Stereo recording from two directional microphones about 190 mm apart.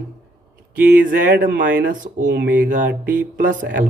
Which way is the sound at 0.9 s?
50° right (ahead or behind).